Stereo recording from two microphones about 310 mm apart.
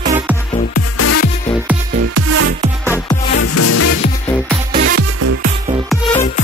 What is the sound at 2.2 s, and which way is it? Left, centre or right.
Music, right.